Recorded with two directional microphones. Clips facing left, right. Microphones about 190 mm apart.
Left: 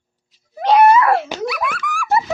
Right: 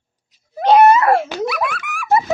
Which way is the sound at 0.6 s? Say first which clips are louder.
Right 1 dB; 30° right (ahead or behind).